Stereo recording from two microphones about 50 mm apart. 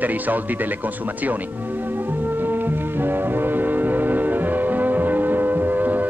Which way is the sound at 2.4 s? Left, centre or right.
Right.